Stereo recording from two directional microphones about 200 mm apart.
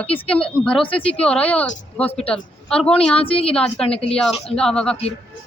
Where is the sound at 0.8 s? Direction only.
25° left (ahead or behind).